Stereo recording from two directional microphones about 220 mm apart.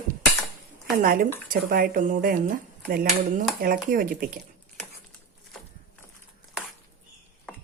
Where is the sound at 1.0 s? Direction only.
40° right (ahead or behind).